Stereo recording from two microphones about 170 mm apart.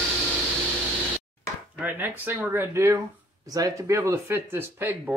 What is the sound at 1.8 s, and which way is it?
Speech, 10° right (ahead or behind).